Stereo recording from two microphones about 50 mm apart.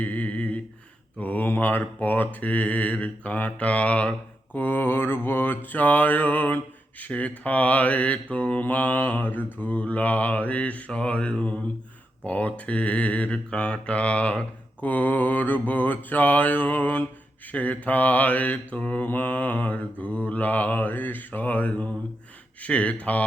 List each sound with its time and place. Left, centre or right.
0.0 s humming: left
1.2 s speech: left
4.5 s speech: left